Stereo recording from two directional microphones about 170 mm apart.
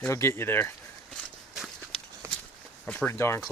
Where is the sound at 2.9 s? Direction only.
10° left (ahead or behind).